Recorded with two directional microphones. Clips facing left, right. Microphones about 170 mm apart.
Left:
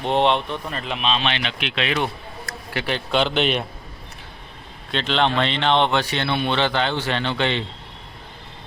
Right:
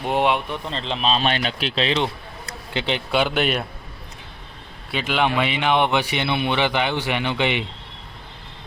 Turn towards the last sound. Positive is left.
turn(degrees=-15)  # may be behind; listen again after turning